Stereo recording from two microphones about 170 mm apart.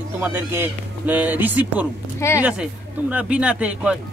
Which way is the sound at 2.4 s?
10° right (ahead or behind).